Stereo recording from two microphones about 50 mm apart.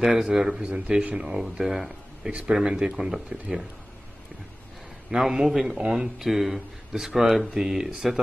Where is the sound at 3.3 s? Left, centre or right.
Right.